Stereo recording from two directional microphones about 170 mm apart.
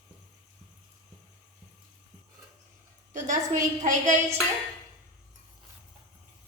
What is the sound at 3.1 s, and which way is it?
A woman's voice, 45° right (ahead or behind).